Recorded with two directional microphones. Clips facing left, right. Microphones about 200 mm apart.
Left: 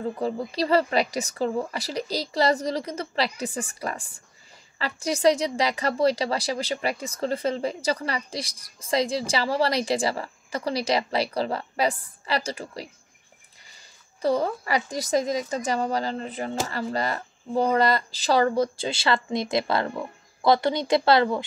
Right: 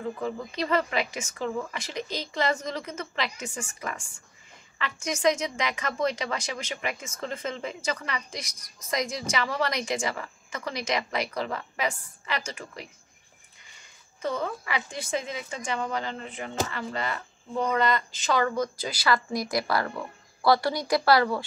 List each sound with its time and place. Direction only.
0.0 s a woman's voice: 35° left (ahead or behind)